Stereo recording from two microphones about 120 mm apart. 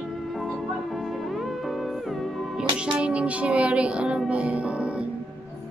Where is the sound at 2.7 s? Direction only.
10° right (ahead or behind).